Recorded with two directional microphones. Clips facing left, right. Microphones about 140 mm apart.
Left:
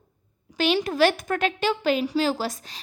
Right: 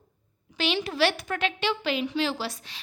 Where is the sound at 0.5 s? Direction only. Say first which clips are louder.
Left 5 dB; 45° left (ahead or behind).